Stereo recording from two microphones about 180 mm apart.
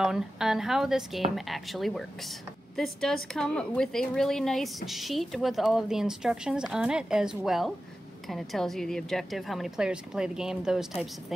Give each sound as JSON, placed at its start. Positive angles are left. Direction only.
{"t": 0.0, "sound": "a woman's voice", "side_deg": 0}